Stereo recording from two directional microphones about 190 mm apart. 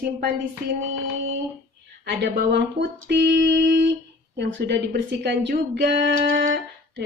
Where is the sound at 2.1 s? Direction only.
60° right (ahead or behind).